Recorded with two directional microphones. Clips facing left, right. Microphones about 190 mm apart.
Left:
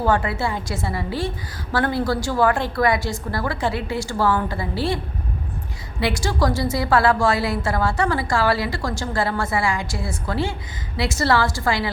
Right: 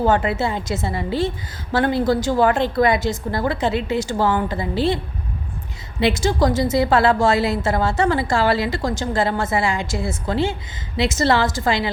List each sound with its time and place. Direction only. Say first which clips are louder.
0.0 s a woman's voice: right 2 dB; 20° right (ahead or behind)
6.0 s a woman's voice: right 4 dB; 20° right (ahead or behind)